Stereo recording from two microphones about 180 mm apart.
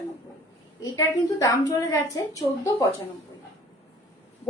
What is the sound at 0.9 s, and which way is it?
A woman's voice, 20° left (ahead or behind).